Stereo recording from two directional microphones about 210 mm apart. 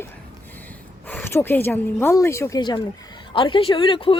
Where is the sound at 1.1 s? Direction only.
10° left (ahead or behind).